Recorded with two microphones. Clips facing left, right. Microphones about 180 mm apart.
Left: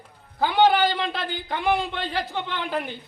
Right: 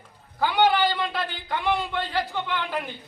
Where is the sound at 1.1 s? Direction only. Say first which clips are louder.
Even; 25° left (ahead or behind).